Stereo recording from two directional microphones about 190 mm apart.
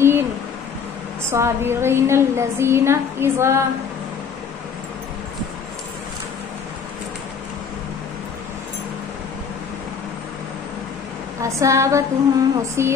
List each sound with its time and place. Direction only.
1.3 s a woman's voice: 15° right (ahead or behind)
11.4 s a woman's voice: 15° right (ahead or behind)